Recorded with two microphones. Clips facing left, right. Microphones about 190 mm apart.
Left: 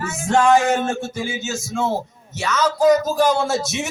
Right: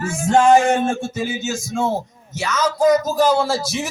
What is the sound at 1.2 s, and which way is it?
A man's voice, 20° right (ahead or behind).